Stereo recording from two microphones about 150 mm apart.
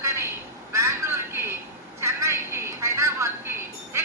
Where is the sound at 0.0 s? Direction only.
20° right (ahead or behind).